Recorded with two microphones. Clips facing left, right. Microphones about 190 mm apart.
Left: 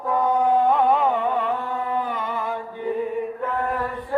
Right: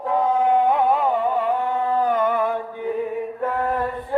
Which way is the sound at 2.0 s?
50° right (ahead or behind).